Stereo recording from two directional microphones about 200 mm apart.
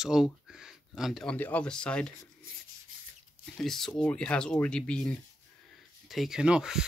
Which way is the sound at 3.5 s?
Centre (ahead or behind).